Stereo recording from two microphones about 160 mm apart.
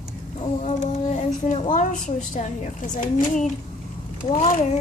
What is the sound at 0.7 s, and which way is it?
A woman's voice, 45° left (ahead or behind).